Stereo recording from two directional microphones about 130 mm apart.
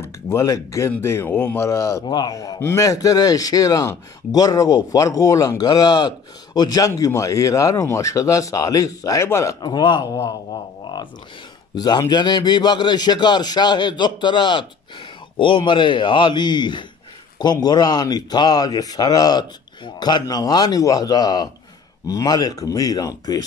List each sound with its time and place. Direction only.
0.0 s a man's voice: 25° left (ahead or behind)
11.7 s a man's voice: 30° left (ahead or behind)